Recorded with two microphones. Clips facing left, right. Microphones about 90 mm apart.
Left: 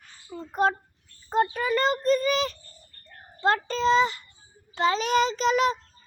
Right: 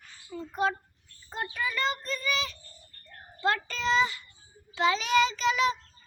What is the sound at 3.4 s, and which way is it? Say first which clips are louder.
A child's voice: left 5 dB; 35° left (ahead or behind).